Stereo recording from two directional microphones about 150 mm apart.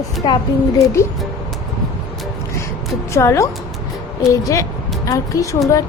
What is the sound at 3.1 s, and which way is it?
A woman's voice, 20° left (ahead or behind).